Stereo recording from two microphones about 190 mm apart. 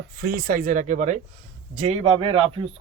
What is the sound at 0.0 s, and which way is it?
Speech, 55° right (ahead or behind).